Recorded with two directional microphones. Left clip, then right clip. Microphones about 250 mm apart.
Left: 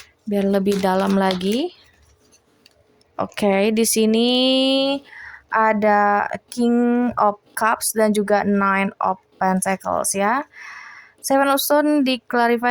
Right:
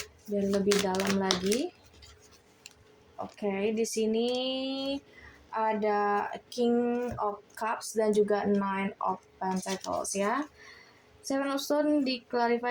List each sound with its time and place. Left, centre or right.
0.3 s speech: left
3.2 s speech: left